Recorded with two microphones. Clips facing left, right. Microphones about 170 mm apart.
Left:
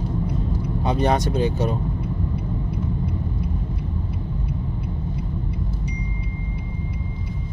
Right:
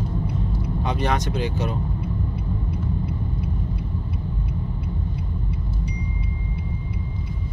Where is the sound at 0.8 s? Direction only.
35° left (ahead or behind).